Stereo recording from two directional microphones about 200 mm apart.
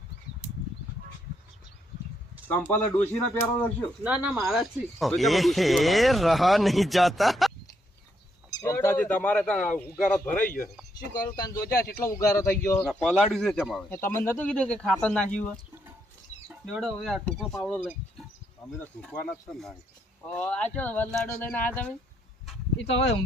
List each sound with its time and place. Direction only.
2.5 s speech: 10° left (ahead or behind)
4.0 s speech: 5° right (ahead or behind)
8.4 s speech: 15° left (ahead or behind)
11.1 s speech: 20° left (ahead or behind); by 14.0 s centre (ahead or behind)
14.0 s speech: 10° left (ahead or behind)
16.5 s speech: 5° right (ahead or behind)
19.0 s speech: 5° left (ahead or behind)
22.9 s speech: 30° left (ahead or behind)